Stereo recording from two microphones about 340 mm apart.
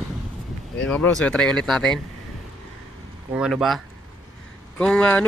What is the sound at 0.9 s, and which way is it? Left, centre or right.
Mantra, centre.